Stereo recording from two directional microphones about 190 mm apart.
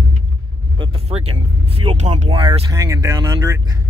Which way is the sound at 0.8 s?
30° right (ahead or behind).